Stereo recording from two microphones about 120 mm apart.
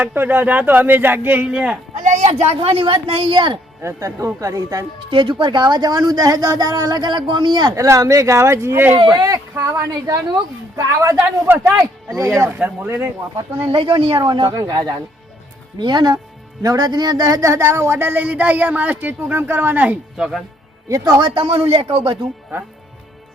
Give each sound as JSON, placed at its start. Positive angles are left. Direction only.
{"t": 0.0, "sound": "speech", "side_deg": -15}
{"t": 2.0, "sound": "a sound", "side_deg": -90}
{"t": 2.6, "sound": "speech", "side_deg": -50}
{"t": 3.8, "sound": "a woman's voice", "side_deg": -25}
{"t": 5.1, "sound": "a woman's voice", "side_deg": -45}
{"t": 7.8, "sound": "a woman's voice", "side_deg": -25}
{"t": 9.1, "sound": "a woman's voice", "side_deg": -30}
{"t": 11.2, "sound": "a woman's voice", "side_deg": -15}
{"t": 12.5, "sound": "speech", "side_deg": -15}
{"t": 13.7, "sound": "a woman's voice", "side_deg": -45}
{"t": 20.8, "sound": "speech", "side_deg": -25}
{"t": 21.2, "sound": "speech", "side_deg": -45}